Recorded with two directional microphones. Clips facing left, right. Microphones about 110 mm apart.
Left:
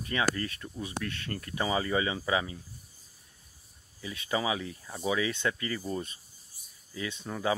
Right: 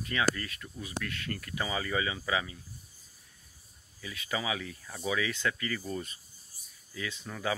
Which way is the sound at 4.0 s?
25° left (ahead or behind).